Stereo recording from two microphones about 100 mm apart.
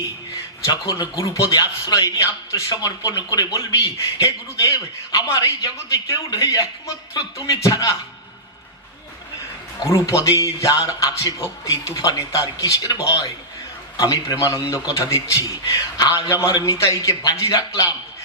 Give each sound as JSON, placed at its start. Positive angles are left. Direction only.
{"t": 0.6, "sound": "a man's voice", "side_deg": 40}
{"t": 9.9, "sound": "a man's voice", "side_deg": 30}